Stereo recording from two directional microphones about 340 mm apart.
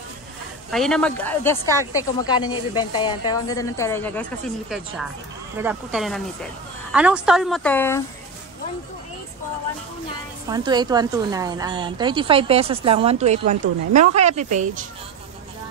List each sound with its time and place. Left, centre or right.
0.7 s a woman's voice: centre
10.5 s a woman's voice: centre